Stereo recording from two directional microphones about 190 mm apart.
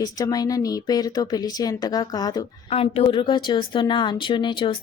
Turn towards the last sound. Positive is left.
turn(degrees=25)  # may be behind; listen again after turning